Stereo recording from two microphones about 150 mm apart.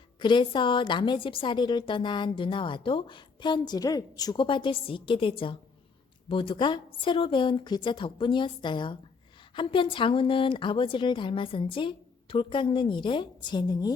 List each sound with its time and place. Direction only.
0.2 s a woman's voice: 30° left (ahead or behind)